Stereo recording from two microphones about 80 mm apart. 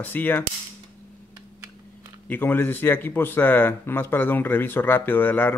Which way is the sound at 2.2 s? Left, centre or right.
Left.